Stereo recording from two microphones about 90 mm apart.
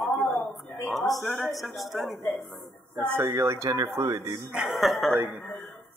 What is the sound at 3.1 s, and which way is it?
Speech, 30° right (ahead or behind).